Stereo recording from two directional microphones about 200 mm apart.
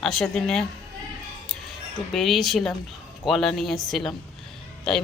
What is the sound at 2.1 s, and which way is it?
A woman's voice, centre (ahead or behind).